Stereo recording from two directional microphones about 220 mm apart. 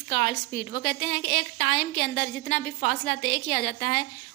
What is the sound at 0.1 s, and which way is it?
A woman's voice, 40° left (ahead or behind).